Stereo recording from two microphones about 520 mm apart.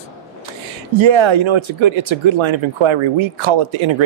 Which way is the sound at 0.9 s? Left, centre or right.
Right.